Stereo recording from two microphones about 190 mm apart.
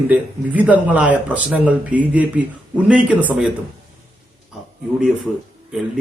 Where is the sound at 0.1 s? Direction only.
5° right (ahead or behind).